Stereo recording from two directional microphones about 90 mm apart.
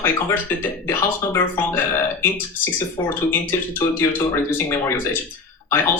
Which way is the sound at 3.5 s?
25° left (ahead or behind).